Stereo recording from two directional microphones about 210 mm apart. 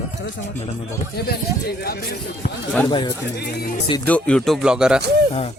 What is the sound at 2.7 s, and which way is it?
Speech, 20° left (ahead or behind).